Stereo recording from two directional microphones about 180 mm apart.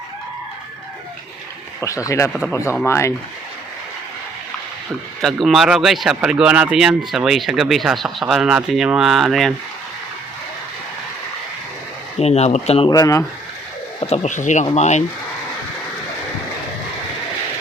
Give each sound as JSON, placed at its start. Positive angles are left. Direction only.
{"t": 1.8, "sound": "speech", "side_deg": 20}
{"t": 5.2, "sound": "speech", "side_deg": 0}
{"t": 12.2, "sound": "speech", "side_deg": 35}
{"t": 12.9, "sound": "speech", "side_deg": 20}
{"t": 14.0, "sound": "speech", "side_deg": 35}